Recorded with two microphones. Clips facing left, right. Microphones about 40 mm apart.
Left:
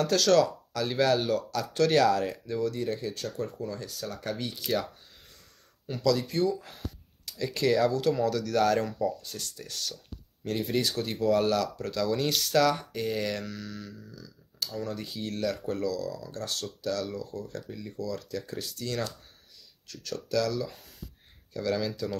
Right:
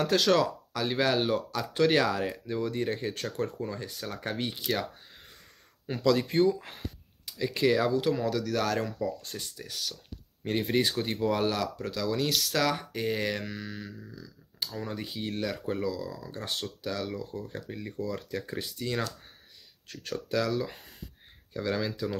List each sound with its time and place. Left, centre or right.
0.0 s speech: centre
5.9 s speech: right
7.2 s speech: centre
10.4 s speech: right
21.5 s speech: right